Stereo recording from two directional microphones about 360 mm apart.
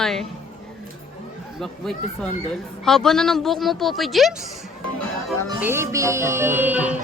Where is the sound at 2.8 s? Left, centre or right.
Centre.